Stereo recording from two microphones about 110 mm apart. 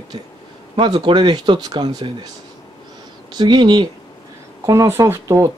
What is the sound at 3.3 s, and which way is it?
Speech, 40° right (ahead or behind).